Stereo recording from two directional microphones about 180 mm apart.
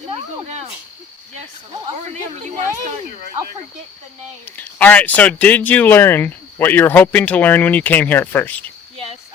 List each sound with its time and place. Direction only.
0.4 s speech: 35° right (ahead or behind)
4.4 s speech: 10° left (ahead or behind)